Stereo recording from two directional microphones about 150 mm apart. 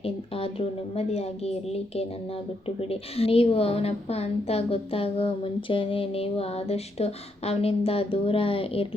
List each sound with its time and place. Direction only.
0.0 s a woman's voice: 40° left (ahead or behind)